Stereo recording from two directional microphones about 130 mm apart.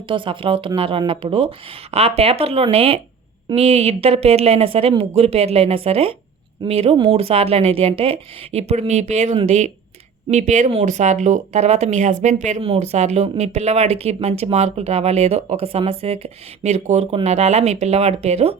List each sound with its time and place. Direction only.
0.1 s speech: 40° right (ahead or behind); by 12.6 s 65° right (ahead or behind)
12.6 s speech: 55° right (ahead or behind)